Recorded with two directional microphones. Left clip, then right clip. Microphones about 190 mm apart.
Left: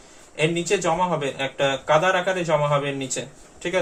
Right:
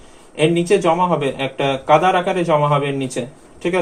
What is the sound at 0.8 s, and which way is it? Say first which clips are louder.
Speech: right 6 dB; 30° right (ahead or behind).